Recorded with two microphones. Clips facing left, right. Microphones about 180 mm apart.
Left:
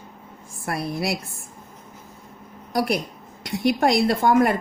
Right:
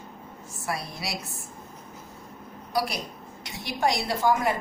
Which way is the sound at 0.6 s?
55° left (ahead or behind).